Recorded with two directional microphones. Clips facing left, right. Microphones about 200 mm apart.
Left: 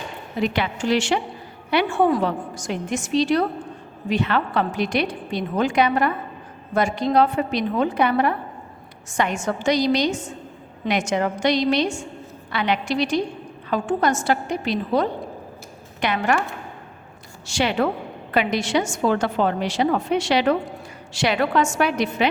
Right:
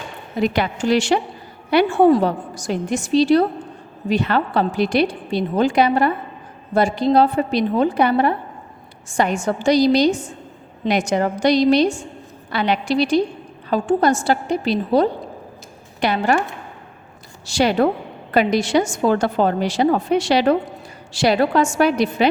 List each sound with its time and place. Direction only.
0.4 s a woman's voice: 40° right (ahead or behind)
17.4 s a woman's voice: 40° right (ahead or behind)